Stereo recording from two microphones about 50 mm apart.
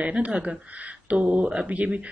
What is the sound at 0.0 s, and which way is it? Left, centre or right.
A woman's voice, right.